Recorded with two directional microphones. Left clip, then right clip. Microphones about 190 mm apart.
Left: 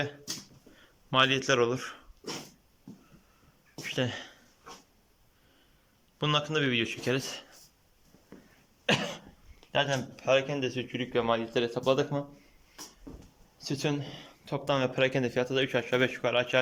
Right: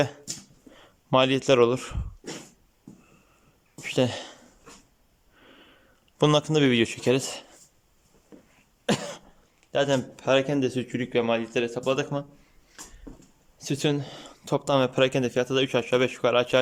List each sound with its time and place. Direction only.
0.7 s speech: 25° right (ahead or behind)
3.8 s a sound: 25° right (ahead or behind)
6.1 s speech: 30° right (ahead or behind)
8.3 s cough: 5° right (ahead or behind)
8.9 s cough: 30° right (ahead or behind)
9.7 s speech: 20° right (ahead or behind)
13.6 s speech: 20° right (ahead or behind)